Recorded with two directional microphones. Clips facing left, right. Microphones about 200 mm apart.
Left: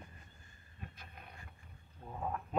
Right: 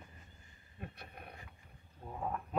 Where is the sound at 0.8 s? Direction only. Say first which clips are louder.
Right 4 dB; 60° right (ahead or behind).